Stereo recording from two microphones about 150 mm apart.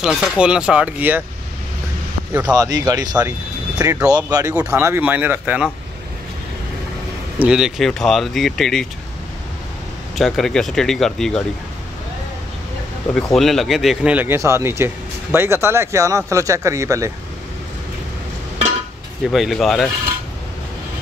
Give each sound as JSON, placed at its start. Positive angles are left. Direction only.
{"t": 0.0, "sound": "speech", "side_deg": -5}
{"t": 2.5, "sound": "speech", "side_deg": -25}
{"t": 7.3, "sound": "speech", "side_deg": -5}
{"t": 10.1, "sound": "speech", "side_deg": 0}
{"t": 13.3, "sound": "speech", "side_deg": 0}
{"t": 19.3, "sound": "speech", "side_deg": 0}